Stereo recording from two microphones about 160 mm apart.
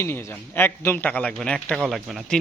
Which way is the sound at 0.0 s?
15° left (ahead or behind).